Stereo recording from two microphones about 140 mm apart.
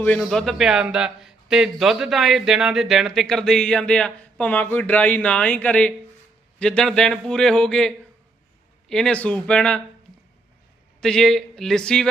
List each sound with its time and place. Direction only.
0.0 s a man's voice: 5° left (ahead or behind)
11.0 s a man's voice: 5° left (ahead or behind)